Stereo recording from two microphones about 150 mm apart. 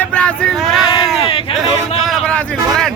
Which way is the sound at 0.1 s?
5° left (ahead or behind).